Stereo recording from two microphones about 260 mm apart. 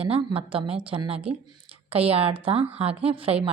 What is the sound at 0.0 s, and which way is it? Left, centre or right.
Speech, right.